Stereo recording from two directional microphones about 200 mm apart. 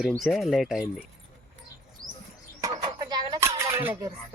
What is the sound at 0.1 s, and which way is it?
Speech, centre (ahead or behind).